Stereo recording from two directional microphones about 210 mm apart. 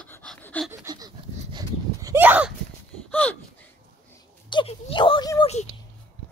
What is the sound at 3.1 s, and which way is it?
Gasp, 5° left (ahead or behind).